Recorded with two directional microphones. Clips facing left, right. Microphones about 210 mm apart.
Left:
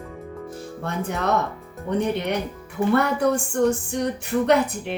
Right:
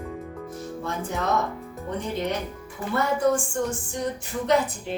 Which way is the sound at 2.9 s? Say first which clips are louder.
Even; 65° left (ahead or behind).